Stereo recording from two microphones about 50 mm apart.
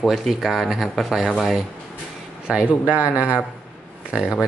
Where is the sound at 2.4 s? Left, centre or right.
Right.